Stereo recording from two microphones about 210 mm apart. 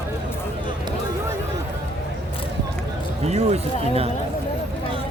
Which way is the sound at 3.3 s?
30° right (ahead or behind).